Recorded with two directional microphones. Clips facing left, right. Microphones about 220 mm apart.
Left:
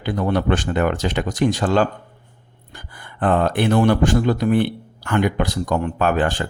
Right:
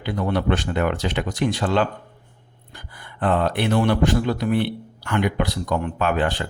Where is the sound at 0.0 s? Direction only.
45° left (ahead or behind).